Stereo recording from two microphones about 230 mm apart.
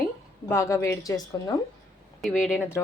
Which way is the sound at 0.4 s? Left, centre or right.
Centre.